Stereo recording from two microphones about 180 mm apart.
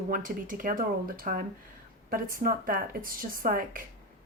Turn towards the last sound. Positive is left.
turn(degrees=-50)  # may be behind; listen again after turning